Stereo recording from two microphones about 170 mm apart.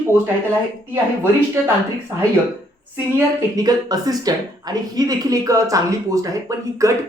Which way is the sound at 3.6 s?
20° right (ahead or behind).